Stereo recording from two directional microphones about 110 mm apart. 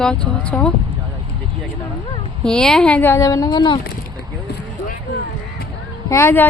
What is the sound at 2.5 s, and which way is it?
Speech, 5° left (ahead or behind).